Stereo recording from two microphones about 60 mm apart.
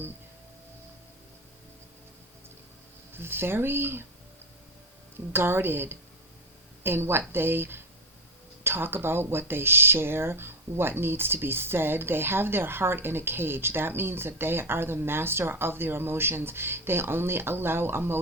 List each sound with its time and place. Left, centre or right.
3.2 s speech: right
5.3 s speech: right